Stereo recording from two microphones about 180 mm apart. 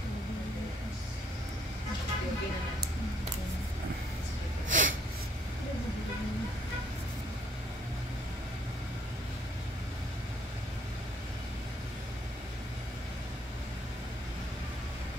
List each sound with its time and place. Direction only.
4.6 s snort: 45° right (ahead or behind)